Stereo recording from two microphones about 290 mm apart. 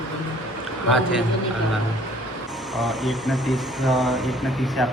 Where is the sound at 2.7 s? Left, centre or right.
Centre.